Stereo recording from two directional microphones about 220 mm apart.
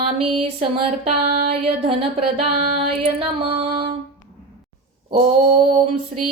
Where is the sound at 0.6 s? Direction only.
25° right (ahead or behind).